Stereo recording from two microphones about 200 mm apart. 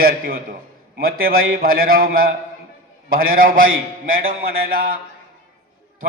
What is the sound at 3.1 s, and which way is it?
Speech, 45° right (ahead or behind).